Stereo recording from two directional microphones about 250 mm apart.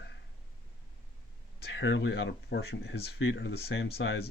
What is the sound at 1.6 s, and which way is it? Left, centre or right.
Speech, left.